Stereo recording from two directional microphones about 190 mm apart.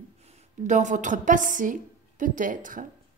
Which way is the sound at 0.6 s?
40° right (ahead or behind).